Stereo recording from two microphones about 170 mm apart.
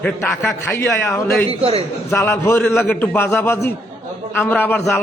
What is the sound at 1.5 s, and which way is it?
Speech, 35° right (ahead or behind).